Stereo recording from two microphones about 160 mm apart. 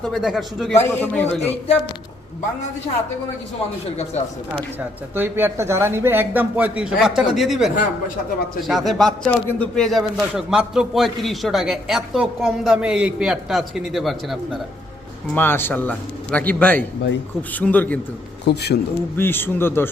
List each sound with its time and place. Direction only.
0.0 s a man's voice: centre (ahead or behind)
0.8 s a man's voice: 10° left (ahead or behind)
1.4 s speech: 40° left (ahead or behind)
3.8 s speech: 45° left (ahead or behind)
5.1 s a man's voice: 15° right (ahead or behind)
15.4 s a man's voice: 15° left (ahead or behind)
18.4 s a man's voice: 90° left
19.1 s a man's voice: 15° left (ahead or behind)